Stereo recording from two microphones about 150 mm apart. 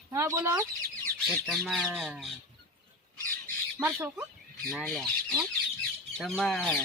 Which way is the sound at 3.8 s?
20° right (ahead or behind).